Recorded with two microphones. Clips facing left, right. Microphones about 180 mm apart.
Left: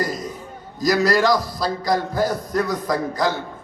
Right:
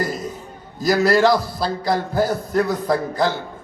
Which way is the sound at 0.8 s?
30° right (ahead or behind).